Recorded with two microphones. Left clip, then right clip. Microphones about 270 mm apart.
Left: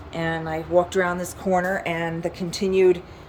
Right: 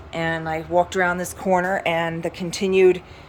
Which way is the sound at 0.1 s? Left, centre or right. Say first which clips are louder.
Right 2 dB; centre.